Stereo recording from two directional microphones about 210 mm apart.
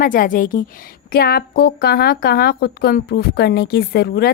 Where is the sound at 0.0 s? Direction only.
40° left (ahead or behind).